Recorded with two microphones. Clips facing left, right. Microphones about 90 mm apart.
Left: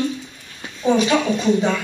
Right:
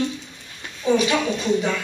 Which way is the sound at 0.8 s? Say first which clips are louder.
Left 3 dB; 25° left (ahead or behind).